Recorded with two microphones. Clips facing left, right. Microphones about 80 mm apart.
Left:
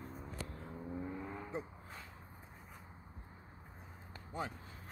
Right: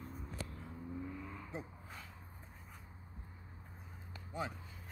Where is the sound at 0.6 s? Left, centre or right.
Left.